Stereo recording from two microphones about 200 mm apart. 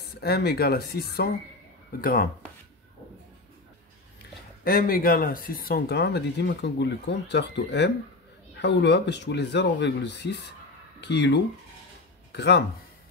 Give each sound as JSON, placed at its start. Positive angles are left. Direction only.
{"t": 0.0, "sound": "speech", "side_deg": 50}
{"t": 4.6, "sound": "speech", "side_deg": 45}